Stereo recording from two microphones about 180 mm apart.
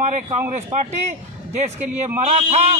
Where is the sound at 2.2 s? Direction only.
35° right (ahead or behind).